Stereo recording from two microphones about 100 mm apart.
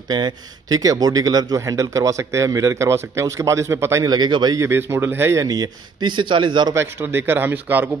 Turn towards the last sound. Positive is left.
turn(degrees=-20)  # may be behind; listen again after turning